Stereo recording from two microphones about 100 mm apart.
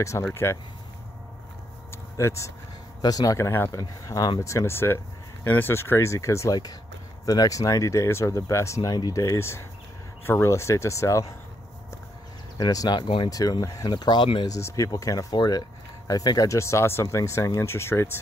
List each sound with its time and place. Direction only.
0.3 s speech: 25° left (ahead or behind)
2.1 s speech: 30° left (ahead or behind)
12.5 s speech: 40° left (ahead or behind)
13.0 s speech: 55° left (ahead or behind)
13.3 s speech: 40° left (ahead or behind); by 14.5 s 55° left (ahead or behind)
14.5 s speech: 35° left (ahead or behind)